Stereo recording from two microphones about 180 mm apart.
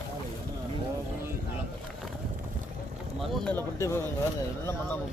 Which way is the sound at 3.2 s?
5° left (ahead or behind).